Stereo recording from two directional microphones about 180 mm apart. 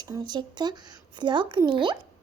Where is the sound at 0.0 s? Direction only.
20° right (ahead or behind).